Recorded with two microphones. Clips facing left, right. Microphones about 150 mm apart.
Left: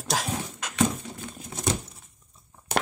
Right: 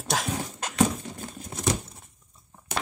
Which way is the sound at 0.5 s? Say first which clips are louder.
Right 2 dB; 35° right (ahead or behind).